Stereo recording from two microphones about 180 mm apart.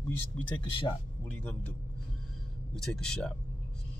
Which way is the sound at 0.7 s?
30° left (ahead or behind).